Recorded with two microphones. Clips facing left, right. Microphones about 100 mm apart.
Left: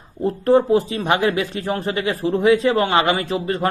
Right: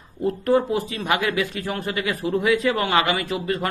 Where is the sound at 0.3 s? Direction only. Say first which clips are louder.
Left 5 dB; 30° left (ahead or behind).